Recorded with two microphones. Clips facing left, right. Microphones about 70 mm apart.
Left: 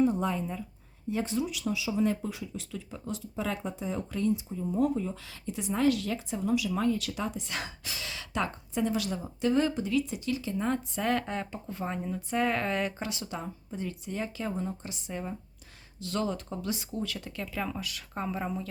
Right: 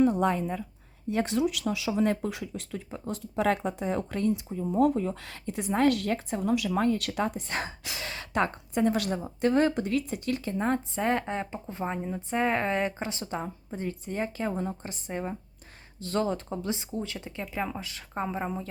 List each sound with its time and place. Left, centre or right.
0.0 s speech: right
2.5 s speech: right
3.3 s speech: right
10.9 s speech: right